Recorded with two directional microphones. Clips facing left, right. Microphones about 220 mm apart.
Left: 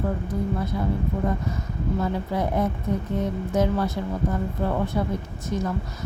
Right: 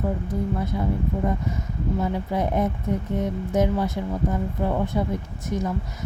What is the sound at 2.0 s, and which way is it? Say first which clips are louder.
Speech: right 1 dB; 20° right (ahead or behind).